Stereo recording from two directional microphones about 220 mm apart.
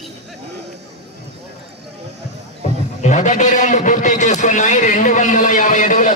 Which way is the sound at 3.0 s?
30° left (ahead or behind).